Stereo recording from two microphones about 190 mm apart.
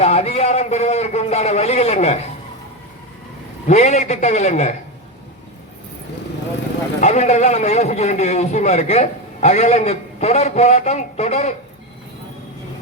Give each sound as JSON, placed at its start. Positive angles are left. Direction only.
{"t": 0.0, "sound": "a man's voice", "side_deg": 35}
{"t": 3.7, "sound": "a man's voice", "side_deg": 40}
{"t": 7.0, "sound": "a man's voice", "side_deg": 35}